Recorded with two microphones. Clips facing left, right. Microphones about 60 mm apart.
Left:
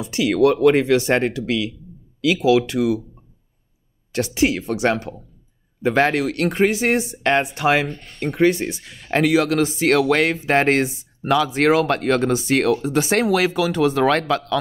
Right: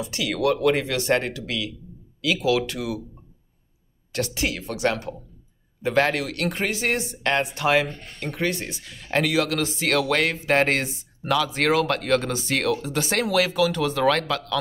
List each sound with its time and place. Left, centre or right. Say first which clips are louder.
0.0 s speech: left 7 dB; left
4.1 s speech: left 7 dB; left